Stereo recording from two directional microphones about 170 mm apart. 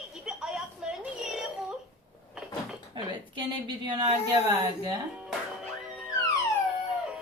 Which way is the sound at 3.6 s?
25° right (ahead or behind).